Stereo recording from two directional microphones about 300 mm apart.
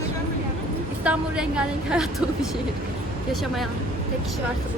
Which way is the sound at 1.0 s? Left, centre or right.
Centre.